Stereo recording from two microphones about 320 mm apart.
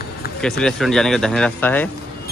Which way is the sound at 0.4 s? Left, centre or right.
Centre.